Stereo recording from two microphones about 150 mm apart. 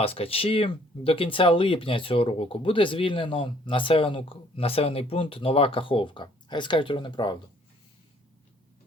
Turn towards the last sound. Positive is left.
turn(degrees=30)  # may be behind; listen again after turning